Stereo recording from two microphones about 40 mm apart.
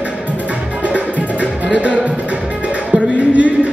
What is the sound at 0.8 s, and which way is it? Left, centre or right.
Music, right.